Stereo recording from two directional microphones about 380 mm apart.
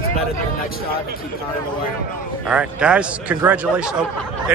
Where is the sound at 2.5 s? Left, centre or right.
Centre.